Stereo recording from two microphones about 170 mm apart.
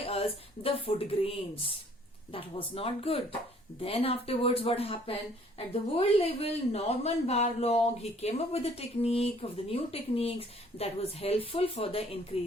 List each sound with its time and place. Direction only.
0.0 s speech: 35° left (ahead or behind)